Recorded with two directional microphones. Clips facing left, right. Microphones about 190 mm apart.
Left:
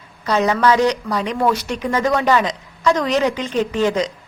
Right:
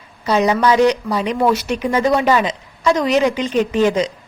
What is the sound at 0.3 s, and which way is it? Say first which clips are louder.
A woman's voice: right 1 dB; 15° right (ahead or behind).